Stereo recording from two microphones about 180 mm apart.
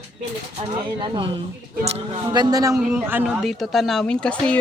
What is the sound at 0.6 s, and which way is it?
Speech, 25° right (ahead or behind).